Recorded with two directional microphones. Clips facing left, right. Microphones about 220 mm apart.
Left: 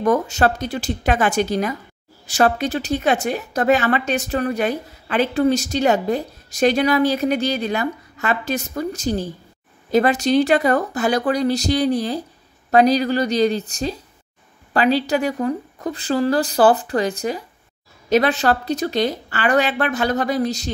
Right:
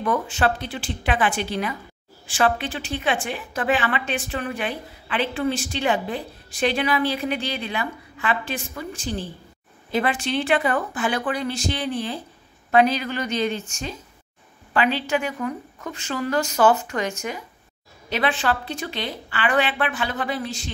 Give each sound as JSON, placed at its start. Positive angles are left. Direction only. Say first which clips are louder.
{"t": 0.0, "sound": "a woman's voice", "louder": "left 5 dB", "side_deg": 40}